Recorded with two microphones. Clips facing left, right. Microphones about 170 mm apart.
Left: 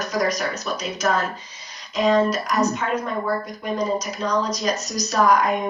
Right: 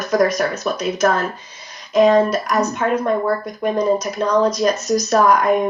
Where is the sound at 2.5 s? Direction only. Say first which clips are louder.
Right 1 dB; centre (ahead or behind).